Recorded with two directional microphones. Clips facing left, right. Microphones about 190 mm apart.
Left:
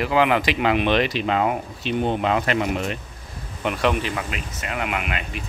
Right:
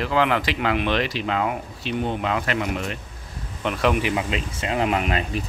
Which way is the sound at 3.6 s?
Centre (ahead or behind).